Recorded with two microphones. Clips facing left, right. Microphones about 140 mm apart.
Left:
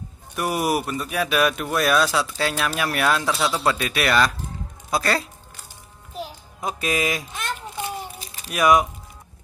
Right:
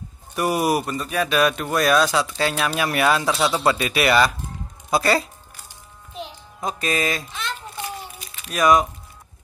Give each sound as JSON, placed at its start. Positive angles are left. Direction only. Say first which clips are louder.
{"t": 0.4, "sound": "speech", "louder": "right 2 dB", "side_deg": 0}
{"t": 6.1, "sound": "music", "louder": "left 1 dB", "side_deg": 5}
{"t": 7.8, "sound": "a sound", "louder": "left 2 dB", "side_deg": 35}
{"t": 8.5, "sound": "speech", "louder": "right 1 dB", "side_deg": 10}